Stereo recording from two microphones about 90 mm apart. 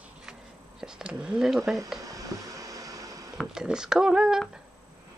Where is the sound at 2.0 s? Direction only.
40° right (ahead or behind).